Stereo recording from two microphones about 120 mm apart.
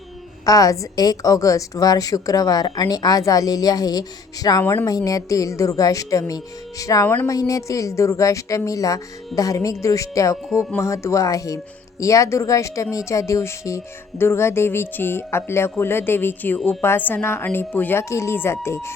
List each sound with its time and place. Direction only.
0.4 s a woman's voice: 30° left (ahead or behind)
4.6 s speech: 20° left (ahead or behind)
4.9 s speech: 30° left (ahead or behind)